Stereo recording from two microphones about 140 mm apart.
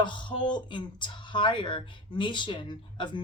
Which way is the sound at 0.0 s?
35° left (ahead or behind).